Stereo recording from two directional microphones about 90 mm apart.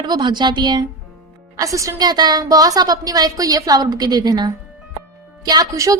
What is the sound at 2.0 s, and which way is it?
A woman's voice, 50° right (ahead or behind).